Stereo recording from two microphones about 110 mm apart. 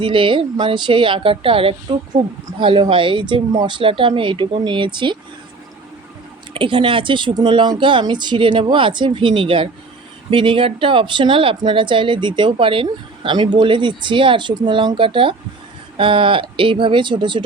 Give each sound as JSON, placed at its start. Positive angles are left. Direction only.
{"t": 0.0, "sound": "speech", "side_deg": -50}
{"t": 6.5, "sound": "speech", "side_deg": -50}